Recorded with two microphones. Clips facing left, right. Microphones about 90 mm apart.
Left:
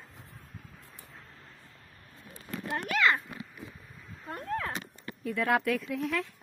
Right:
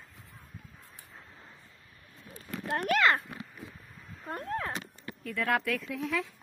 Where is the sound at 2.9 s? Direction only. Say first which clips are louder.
Right 1 dB; 50° right (ahead or behind).